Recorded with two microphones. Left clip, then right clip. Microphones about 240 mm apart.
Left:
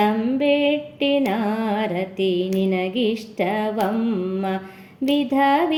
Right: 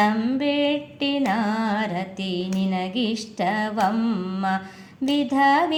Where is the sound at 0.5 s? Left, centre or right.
Right.